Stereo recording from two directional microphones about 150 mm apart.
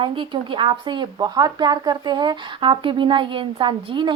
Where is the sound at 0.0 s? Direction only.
35° right (ahead or behind).